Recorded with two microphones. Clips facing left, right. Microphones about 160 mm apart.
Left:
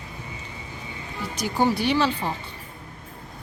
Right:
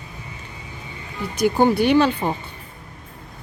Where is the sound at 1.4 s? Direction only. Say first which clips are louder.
Right 6 dB; 55° right (ahead or behind).